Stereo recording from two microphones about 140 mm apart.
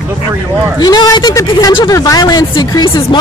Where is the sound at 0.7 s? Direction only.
30° left (ahead or behind).